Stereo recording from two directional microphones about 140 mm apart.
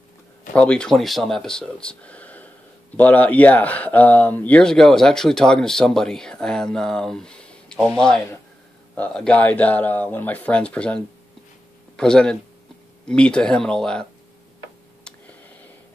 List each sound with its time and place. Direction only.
0.6 s speech: 5° left (ahead or behind)
12.0 s speech: 5° left (ahead or behind)